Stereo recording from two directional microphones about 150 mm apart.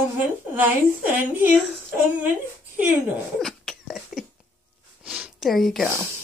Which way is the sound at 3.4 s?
Centre (ahead or behind).